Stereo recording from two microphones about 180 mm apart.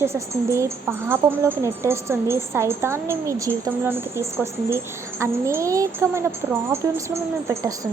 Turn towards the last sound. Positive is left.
turn(degrees=-15)  # may be behind; listen again after turning